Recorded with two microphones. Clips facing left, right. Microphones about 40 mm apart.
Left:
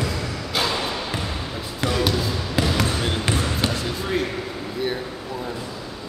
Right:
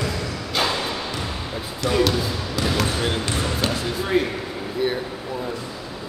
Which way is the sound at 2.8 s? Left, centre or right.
Centre.